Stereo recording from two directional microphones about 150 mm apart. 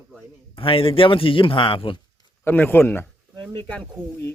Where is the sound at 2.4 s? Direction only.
15° left (ahead or behind).